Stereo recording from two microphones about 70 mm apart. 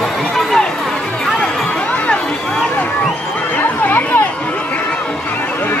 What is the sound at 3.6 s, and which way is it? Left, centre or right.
Chatter, left.